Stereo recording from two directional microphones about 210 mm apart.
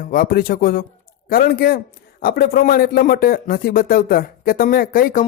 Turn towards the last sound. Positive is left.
turn(degrees=45)  # may be behind; listen again after turning